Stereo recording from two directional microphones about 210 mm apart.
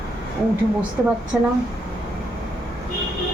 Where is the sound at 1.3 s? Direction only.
5° right (ahead or behind).